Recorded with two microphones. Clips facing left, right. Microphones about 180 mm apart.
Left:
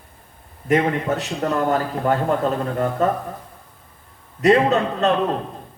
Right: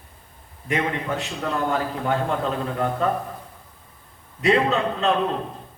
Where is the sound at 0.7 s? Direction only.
45° left (ahead or behind).